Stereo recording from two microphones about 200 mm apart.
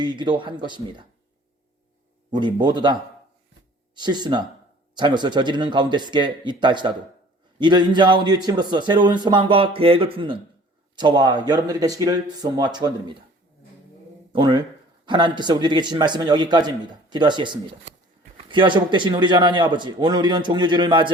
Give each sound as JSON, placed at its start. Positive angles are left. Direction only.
{"t": 0.0, "sound": "a man's voice", "side_deg": -20}
{"t": 2.3, "sound": "a man's voice", "side_deg": -20}
{"t": 14.3, "sound": "a man's voice", "side_deg": -20}